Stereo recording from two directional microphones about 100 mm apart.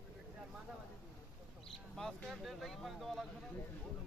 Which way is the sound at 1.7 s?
5° left (ahead or behind).